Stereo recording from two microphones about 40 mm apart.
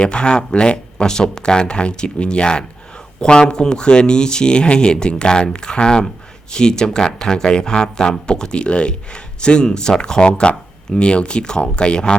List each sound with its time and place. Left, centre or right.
0.0 s speech: left